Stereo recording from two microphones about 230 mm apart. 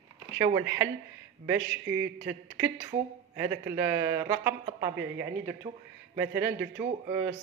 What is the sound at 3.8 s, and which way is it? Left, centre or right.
Speech, centre.